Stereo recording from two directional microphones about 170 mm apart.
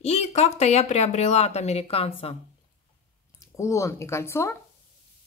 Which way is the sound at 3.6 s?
15° left (ahead or behind).